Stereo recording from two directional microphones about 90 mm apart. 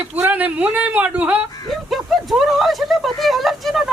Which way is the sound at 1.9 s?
Centre (ahead or behind).